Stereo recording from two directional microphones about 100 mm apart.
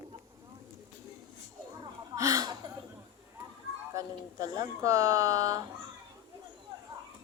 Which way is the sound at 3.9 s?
40° right (ahead or behind).